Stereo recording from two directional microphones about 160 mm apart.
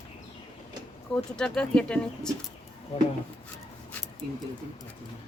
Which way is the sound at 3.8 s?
10° left (ahead or behind).